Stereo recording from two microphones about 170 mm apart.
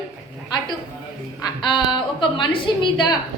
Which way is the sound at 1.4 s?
30° left (ahead or behind).